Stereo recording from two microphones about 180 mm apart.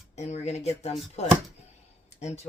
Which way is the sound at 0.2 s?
40° left (ahead or behind).